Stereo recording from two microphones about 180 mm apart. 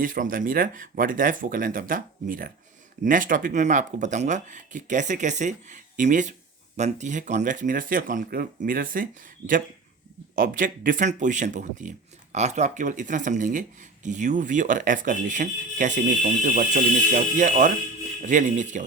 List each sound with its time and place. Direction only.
0.0 s speech: 50° right (ahead or behind)